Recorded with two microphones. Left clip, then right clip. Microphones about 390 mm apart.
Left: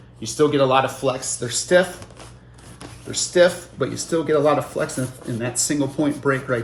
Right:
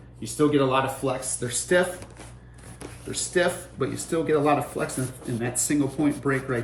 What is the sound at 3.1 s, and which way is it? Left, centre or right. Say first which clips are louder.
Speech: left 8 dB; centre.